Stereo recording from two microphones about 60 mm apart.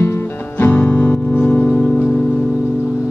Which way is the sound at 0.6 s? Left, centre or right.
Left.